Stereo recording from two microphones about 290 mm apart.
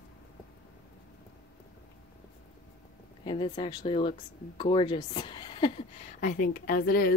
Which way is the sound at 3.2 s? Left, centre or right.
Centre.